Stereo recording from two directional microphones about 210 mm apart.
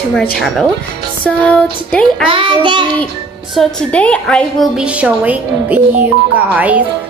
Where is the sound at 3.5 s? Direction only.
Centre (ahead or behind).